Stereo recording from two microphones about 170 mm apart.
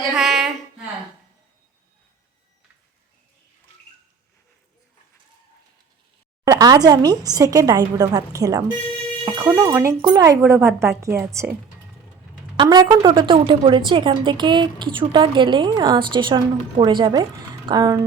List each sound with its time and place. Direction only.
0.1 s a sound: centre (ahead or behind)
6.4 s a woman's voice: 20° right (ahead or behind)
9.2 s music: 20° right (ahead or behind)
10.0 s a woman's voice: 20° right (ahead or behind)
12.5 s a woman's voice: 25° right (ahead or behind)